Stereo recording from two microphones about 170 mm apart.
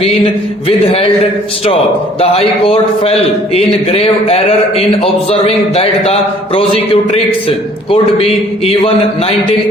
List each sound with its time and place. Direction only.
2.2 s speech: 35° left (ahead or behind)